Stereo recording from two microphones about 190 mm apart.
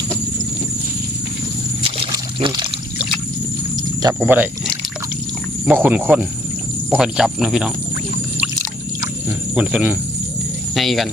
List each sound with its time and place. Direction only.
1.8 s pour: 25° right (ahead or behind)
4.2 s speech: 5° right (ahead or behind)
9.6 s speech: 5° right (ahead or behind)